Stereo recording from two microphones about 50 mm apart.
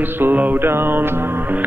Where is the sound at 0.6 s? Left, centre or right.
Right.